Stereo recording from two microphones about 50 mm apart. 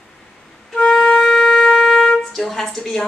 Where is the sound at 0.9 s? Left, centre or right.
Centre.